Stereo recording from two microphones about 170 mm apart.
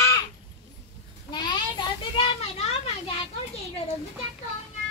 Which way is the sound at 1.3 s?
25° left (ahead or behind).